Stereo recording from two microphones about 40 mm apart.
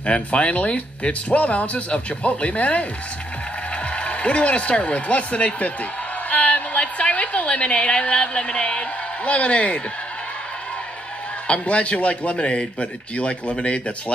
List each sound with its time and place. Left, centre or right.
0.0 s speech: left
3.9 s speech: left
6.3 s a sound: left
11.4 s speech: left